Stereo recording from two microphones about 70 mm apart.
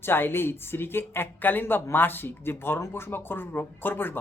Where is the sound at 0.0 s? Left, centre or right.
Left.